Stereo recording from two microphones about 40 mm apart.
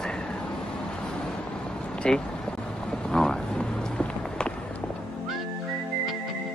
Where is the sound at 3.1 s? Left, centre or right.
Centre.